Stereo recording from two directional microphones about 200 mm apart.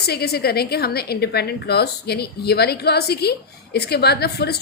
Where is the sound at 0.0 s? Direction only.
55° left (ahead or behind).